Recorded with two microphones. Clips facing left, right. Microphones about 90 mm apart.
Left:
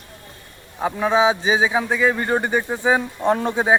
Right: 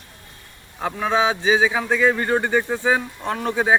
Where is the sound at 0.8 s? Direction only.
10° left (ahead or behind).